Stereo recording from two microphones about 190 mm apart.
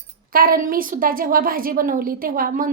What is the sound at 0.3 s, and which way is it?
A woman's voice, 50° right (ahead or behind).